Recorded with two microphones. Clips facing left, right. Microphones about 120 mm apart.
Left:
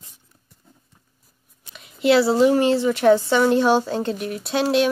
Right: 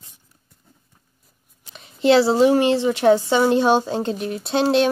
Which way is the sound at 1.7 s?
30° right (ahead or behind).